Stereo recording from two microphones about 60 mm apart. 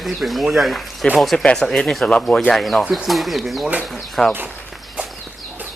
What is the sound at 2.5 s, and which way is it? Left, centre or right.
Speech, centre.